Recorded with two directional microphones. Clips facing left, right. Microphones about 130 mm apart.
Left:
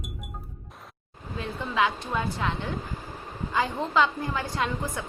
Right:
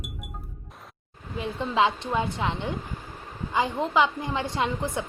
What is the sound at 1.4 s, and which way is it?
A woman's voice, 20° right (ahead or behind).